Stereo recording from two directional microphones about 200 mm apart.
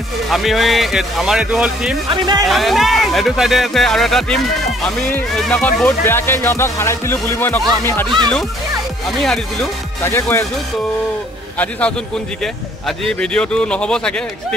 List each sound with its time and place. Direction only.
0.3 s speech: centre (ahead or behind)
2.0 s speech: 20° right (ahead or behind)
2.4 s speech: centre (ahead or behind)
9.2 s speech: centre (ahead or behind)
10.0 s speech: 15° left (ahead or behind)
11.5 s speech: 10° left (ahead or behind)